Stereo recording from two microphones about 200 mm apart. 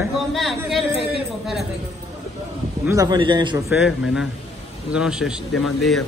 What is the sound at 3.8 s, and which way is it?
Speech, centre (ahead or behind).